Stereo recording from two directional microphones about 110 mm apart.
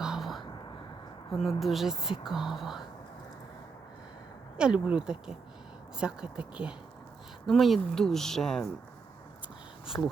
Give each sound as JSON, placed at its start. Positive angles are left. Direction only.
{"t": 0.0, "sound": "a sound", "side_deg": -5}
{"t": 1.3, "sound": "speech", "side_deg": 0}
{"t": 4.5, "sound": "speech", "side_deg": -10}
{"t": 9.9, "sound": "speech", "side_deg": 20}